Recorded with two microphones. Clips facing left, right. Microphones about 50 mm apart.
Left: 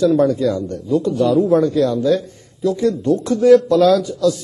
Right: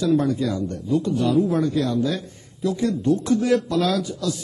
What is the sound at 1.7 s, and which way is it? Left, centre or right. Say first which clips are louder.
A man's voice: left 7 dB; right.